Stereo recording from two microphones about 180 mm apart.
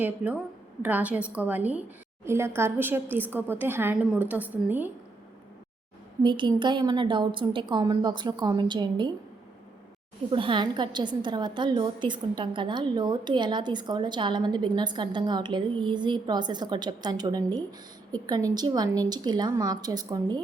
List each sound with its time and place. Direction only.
0.8 s a woman's voice: 10° right (ahead or behind)
6.2 s a woman's voice: 25° right (ahead or behind)
10.3 s a woman's voice: 25° right (ahead or behind)